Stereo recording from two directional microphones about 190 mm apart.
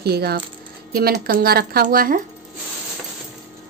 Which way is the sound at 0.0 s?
55° right (ahead or behind).